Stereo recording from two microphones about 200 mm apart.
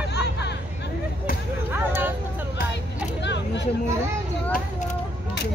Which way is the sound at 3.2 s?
60° left (ahead or behind).